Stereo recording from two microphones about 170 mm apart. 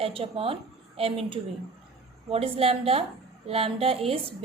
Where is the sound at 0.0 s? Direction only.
35° right (ahead or behind).